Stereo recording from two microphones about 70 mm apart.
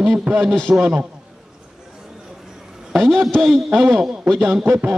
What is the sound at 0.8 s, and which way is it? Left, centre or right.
Speech, centre.